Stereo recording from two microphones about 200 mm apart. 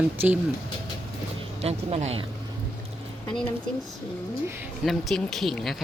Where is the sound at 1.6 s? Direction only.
30° right (ahead or behind).